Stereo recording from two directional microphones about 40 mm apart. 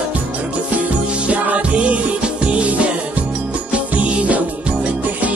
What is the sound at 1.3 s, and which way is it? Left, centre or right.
Music, right.